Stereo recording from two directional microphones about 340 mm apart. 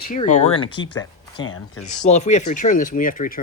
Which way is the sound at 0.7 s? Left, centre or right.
Left.